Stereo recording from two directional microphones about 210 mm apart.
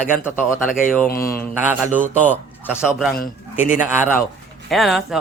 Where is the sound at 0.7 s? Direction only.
40° left (ahead or behind).